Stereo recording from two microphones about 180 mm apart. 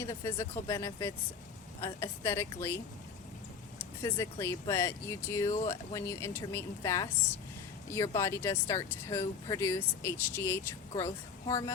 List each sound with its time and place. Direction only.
0.0 s speech: 15° left (ahead or behind)
4.0 s speech: 15° left (ahead or behind)